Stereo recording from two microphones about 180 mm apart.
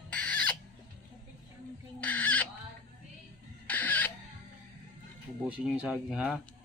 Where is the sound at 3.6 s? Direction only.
10° left (ahead or behind).